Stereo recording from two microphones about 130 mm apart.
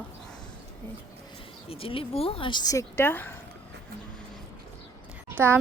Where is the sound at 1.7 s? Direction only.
45° left (ahead or behind).